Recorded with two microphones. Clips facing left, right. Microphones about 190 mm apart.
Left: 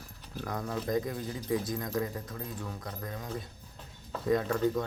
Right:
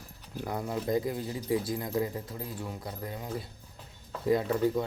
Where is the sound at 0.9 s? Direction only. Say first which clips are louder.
Right 2 dB; 25° right (ahead or behind).